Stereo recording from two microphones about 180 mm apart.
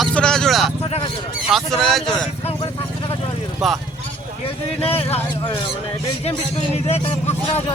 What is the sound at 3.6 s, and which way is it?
Speech, centre (ahead or behind).